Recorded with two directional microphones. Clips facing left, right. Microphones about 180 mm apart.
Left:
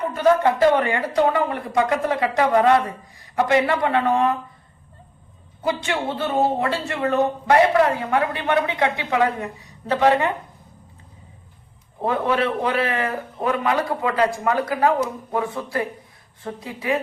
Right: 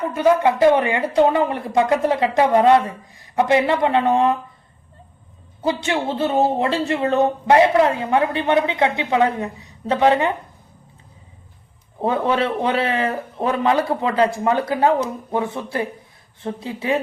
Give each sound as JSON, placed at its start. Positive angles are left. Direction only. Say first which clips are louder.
{"t": 0.1, "sound": "speech", "louder": "right 1 dB", "side_deg": -15}
{"t": 5.6, "sound": "speech", "louder": "right 2 dB", "side_deg": -25}
{"t": 12.0, "sound": "speech", "louder": "right 2 dB", "side_deg": -25}